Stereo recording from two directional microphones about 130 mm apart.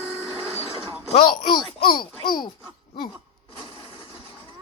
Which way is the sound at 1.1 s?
35° left (ahead or behind).